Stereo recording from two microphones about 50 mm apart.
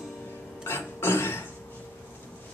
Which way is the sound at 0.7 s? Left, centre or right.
Left.